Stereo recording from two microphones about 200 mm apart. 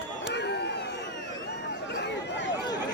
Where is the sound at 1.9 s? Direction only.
55° left (ahead or behind).